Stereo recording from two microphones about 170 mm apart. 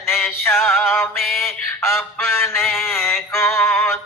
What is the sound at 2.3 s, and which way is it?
Music, 15° left (ahead or behind).